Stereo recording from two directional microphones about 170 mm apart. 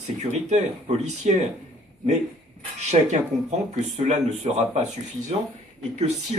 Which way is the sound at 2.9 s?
40° right (ahead or behind).